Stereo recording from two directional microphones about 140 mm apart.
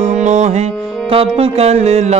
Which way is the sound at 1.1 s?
45° right (ahead or behind).